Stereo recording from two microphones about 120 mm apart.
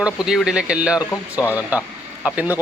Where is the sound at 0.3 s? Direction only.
5° right (ahead or behind).